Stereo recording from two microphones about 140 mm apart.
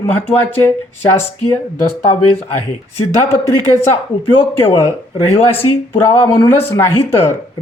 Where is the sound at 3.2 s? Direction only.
20° left (ahead or behind).